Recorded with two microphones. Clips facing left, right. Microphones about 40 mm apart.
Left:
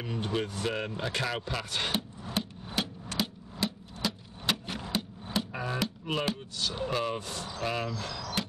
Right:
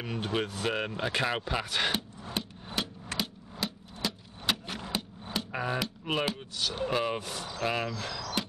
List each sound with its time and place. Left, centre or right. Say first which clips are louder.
0.0 s speech: even; centre
1.7 s speech: right 3 dB; centre
2.2 s hammer: left 2 dB; centre
3.2 s a sound: left 3 dB; centre
5.5 s a sound: right 2 dB; centre
6.2 s speech: even; centre